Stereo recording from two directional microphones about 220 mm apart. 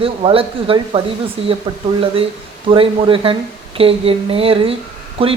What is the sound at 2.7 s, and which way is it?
Speech, 25° right (ahead or behind).